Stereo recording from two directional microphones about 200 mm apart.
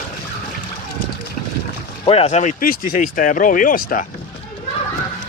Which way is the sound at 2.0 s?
30° left (ahead or behind).